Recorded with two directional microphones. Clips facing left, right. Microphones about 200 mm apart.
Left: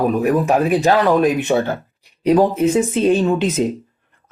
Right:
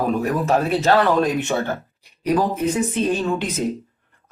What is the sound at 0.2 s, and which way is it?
Speech, 15° left (ahead or behind).